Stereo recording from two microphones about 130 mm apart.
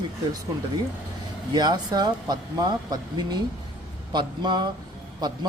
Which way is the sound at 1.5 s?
30° right (ahead or behind).